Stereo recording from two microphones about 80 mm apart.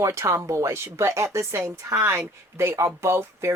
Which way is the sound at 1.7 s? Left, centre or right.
Right.